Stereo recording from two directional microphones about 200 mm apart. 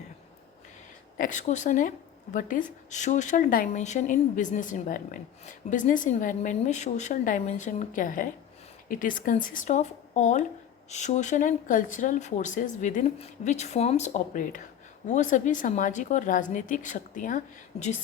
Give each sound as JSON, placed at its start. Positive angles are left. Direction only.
{"t": 1.1, "sound": "speech", "side_deg": 40}